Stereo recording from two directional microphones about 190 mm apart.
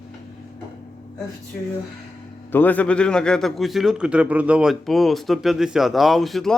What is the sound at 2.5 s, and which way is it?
A man's voice, 10° left (ahead or behind).